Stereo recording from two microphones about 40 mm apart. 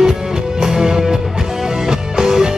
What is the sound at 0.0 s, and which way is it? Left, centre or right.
Music, centre.